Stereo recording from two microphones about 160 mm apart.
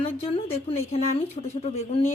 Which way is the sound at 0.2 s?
40° left (ahead or behind).